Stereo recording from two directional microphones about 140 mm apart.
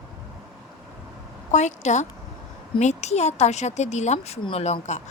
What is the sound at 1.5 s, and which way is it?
A woman's voice, 55° left (ahead or behind).